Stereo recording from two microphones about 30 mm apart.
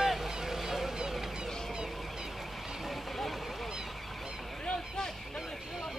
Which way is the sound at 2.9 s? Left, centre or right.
Centre.